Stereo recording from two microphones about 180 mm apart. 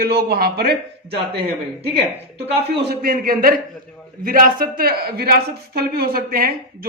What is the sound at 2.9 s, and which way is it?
A man's voice, 55° right (ahead or behind).